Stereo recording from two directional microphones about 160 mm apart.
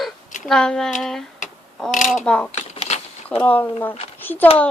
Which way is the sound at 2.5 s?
45° left (ahead or behind).